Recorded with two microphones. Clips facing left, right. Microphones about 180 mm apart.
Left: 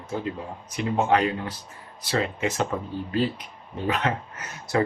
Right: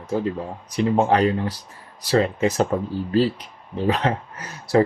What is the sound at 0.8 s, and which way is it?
Speech, 35° right (ahead or behind).